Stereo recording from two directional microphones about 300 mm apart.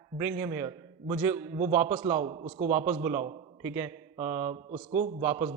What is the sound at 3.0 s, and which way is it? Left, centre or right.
A man's voice, centre.